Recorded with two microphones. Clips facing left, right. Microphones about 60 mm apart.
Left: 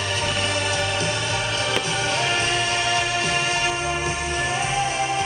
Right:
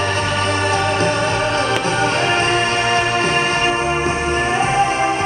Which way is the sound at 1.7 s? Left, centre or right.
Right.